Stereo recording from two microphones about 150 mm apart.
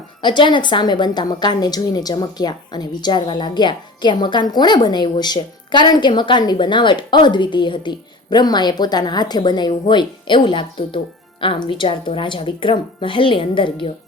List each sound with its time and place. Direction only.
0.2 s a woman's voice: 30° left (ahead or behind)